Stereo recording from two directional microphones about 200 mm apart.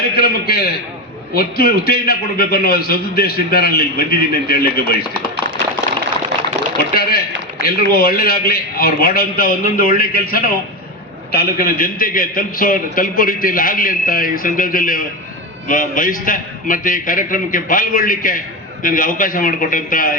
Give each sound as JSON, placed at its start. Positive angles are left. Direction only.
{"t": 0.2, "sound": "a man's voice", "side_deg": 50}
{"t": 6.9, "sound": "a man's voice", "side_deg": 50}